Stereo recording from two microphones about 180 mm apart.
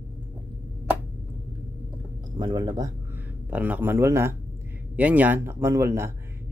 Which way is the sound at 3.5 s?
10° right (ahead or behind).